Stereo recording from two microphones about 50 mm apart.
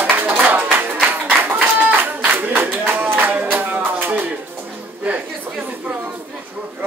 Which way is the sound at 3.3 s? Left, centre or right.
Right.